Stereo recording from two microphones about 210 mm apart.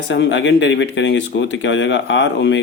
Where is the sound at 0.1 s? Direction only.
60° left (ahead or behind).